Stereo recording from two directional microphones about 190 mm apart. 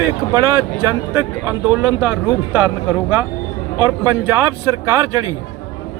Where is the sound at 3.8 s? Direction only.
15° right (ahead or behind).